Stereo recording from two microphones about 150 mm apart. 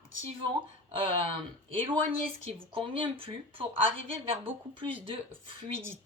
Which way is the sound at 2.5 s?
35° right (ahead or behind).